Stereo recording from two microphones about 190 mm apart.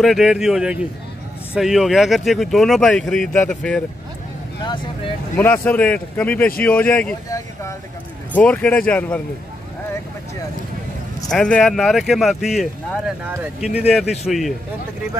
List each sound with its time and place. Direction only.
0.0 s speech: centre (ahead or behind)
5.3 s speech: 10° left (ahead or behind)
7.2 s speech: 15° left (ahead or behind)
11.2 s speech: 5° left (ahead or behind)